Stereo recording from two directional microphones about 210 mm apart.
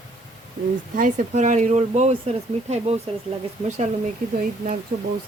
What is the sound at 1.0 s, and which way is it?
Speech, 35° right (ahead or behind).